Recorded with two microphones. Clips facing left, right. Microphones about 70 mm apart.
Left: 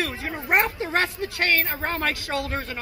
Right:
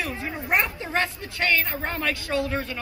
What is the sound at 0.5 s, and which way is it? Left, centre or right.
Speech, left.